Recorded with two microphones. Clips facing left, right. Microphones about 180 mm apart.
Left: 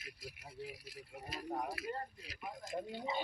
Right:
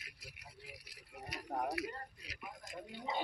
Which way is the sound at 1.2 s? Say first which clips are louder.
Right 1 dB; 25° left (ahead or behind).